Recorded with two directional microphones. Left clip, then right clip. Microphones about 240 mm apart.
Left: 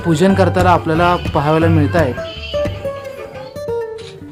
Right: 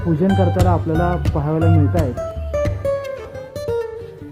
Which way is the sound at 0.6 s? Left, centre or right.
Centre.